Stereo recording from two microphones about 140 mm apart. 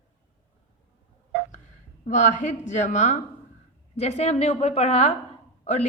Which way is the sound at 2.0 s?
60° left (ahead or behind).